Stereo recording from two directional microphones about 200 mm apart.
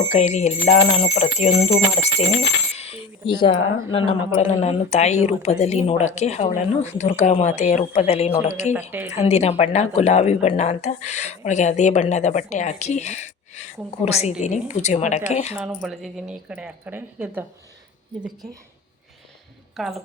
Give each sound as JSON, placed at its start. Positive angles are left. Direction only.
{"t": 0.1, "sound": "speech", "side_deg": 35}
{"t": 2.7, "sound": "coin", "side_deg": 30}
{"t": 3.9, "sound": "speech", "side_deg": 30}
{"t": 15.5, "sound": "speech", "side_deg": -5}
{"t": 19.7, "sound": "a woman's voice", "side_deg": 0}